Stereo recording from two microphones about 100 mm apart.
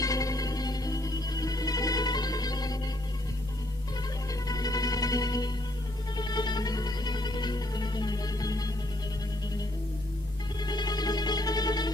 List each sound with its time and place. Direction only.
0.0 s music: 35° left (ahead or behind)
4.5 s music: 40° left (ahead or behind)
10.6 s music: 45° left (ahead or behind)